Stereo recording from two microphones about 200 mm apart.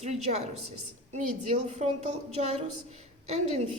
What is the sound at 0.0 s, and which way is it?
Speech, 35° right (ahead or behind).